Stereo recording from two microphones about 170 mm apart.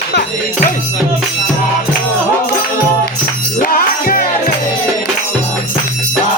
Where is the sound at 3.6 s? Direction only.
60° left (ahead or behind).